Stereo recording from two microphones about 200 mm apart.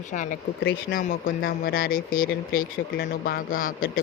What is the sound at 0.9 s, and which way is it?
Speech, 45° left (ahead or behind).